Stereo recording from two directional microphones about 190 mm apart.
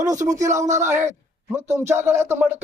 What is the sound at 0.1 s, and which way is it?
A man's voice, 15° right (ahead or behind).